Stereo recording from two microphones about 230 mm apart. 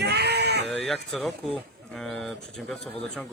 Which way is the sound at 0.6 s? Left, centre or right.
Centre.